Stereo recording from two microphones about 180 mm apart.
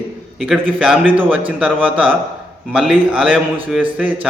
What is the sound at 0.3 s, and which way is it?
A man's voice, centre (ahead or behind).